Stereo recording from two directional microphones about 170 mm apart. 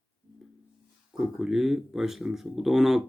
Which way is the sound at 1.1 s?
Centre (ahead or behind).